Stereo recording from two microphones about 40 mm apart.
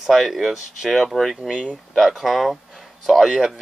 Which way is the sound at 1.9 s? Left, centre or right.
Centre.